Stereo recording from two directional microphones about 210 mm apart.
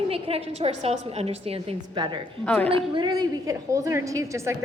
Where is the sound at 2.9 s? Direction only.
20° right (ahead or behind).